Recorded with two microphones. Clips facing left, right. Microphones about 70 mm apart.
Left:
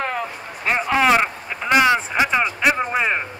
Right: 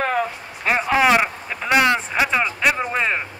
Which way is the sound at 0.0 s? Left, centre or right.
Centre.